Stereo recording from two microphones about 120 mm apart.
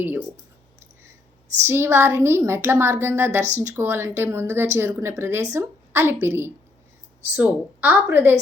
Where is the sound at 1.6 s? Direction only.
20° right (ahead or behind).